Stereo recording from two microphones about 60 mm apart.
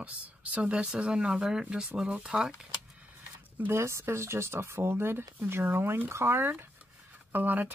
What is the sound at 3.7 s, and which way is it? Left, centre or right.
Speech, right.